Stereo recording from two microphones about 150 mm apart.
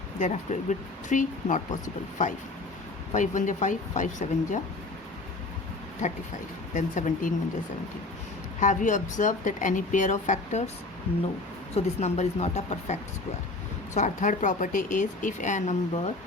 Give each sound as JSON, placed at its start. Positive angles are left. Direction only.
{"t": 0.2, "sound": "speech", "side_deg": 55}
{"t": 6.7, "sound": "speech", "side_deg": 60}
{"t": 8.6, "sound": "speech", "side_deg": 55}
{"t": 11.7, "sound": "speech", "side_deg": 45}